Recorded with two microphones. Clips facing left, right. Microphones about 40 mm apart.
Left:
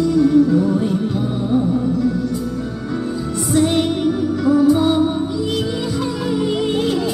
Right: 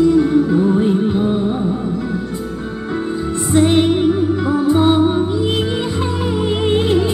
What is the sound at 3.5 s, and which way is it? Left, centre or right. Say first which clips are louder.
Music: right 4 dB; right.